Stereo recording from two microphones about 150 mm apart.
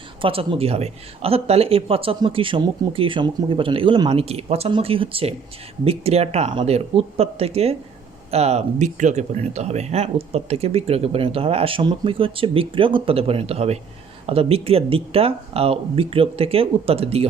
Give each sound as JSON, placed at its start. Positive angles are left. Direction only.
{"t": 0.2, "sound": "speech", "side_deg": -35}